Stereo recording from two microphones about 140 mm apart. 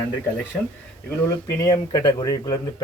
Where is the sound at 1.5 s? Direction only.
25° left (ahead or behind).